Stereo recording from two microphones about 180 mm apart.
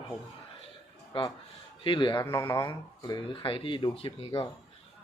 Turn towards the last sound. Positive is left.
turn(degrees=30)  # may be behind; listen again after turning